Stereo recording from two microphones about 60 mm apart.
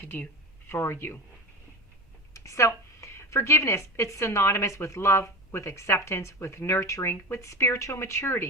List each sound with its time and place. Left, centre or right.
0.0 s speech: left
2.3 s a woman's voice: left